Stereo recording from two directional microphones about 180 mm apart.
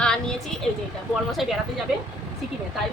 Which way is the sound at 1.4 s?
Centre (ahead or behind).